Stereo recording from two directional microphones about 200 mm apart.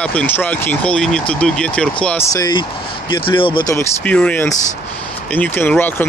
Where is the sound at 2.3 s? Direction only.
20° left (ahead or behind).